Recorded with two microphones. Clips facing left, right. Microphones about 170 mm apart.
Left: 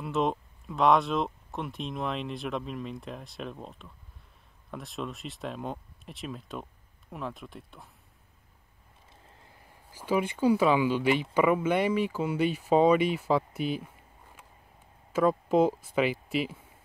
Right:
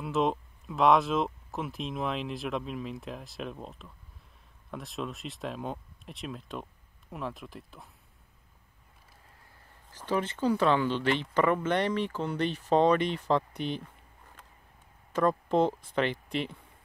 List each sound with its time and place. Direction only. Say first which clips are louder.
0.0 s speech: even; centre (ahead or behind)
9.8 s speech: left 2 dB; 10° left (ahead or behind)
15.1 s speech: left 2 dB; 5° left (ahead or behind)